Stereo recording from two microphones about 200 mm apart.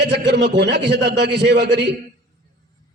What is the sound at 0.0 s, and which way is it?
A man's voice, 55° right (ahead or behind).